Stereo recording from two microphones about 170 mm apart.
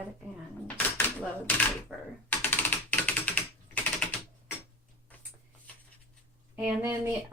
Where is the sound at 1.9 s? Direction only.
10° right (ahead or behind).